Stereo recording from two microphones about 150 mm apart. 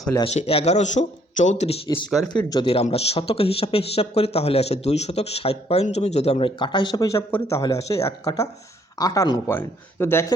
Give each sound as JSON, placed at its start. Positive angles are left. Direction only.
{"t": 0.3, "sound": "speech", "side_deg": 40}
{"t": 2.0, "sound": "speech", "side_deg": 5}
{"t": 2.5, "sound": "speech", "side_deg": 35}
{"t": 6.6, "sound": "speech", "side_deg": 30}